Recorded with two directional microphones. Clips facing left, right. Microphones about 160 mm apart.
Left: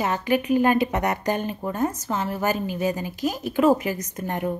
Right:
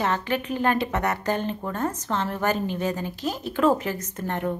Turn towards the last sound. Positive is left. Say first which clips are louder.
# left 1 dB
turn(degrees=15)  # may be behind; listen again after turning